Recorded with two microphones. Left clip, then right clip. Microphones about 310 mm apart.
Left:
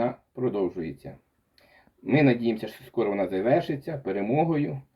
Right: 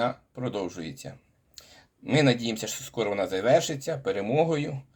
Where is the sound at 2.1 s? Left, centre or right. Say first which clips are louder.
Left 1 dB; right.